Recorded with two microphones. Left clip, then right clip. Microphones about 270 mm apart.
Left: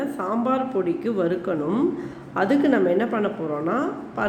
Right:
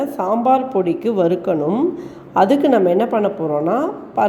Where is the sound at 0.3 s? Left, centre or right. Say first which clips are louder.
Right 9 dB; centre.